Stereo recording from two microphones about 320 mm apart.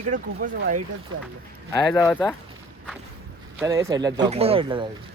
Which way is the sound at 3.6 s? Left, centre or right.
Centre.